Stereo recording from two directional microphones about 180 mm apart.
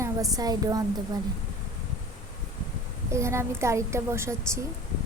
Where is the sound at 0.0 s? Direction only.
20° right (ahead or behind).